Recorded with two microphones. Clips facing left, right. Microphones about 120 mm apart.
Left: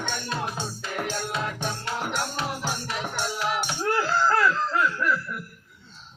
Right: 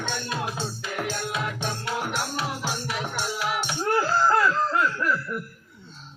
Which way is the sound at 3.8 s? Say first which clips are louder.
Right 2 dB; 15° right (ahead or behind).